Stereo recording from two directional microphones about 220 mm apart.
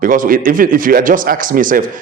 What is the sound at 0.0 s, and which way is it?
Speech, 40° right (ahead or behind).